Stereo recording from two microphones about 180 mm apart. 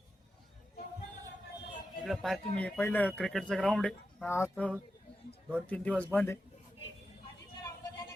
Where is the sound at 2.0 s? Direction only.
Centre (ahead or behind).